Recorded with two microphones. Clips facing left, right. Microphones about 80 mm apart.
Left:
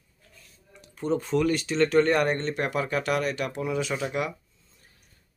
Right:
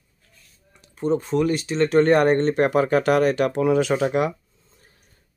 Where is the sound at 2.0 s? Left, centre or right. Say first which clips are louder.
Right 7 dB; right.